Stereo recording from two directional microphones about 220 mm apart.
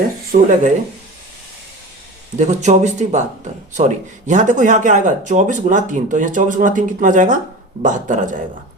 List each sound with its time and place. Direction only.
0.3 s speech: 40° right (ahead or behind)
2.4 s speech: 30° right (ahead or behind)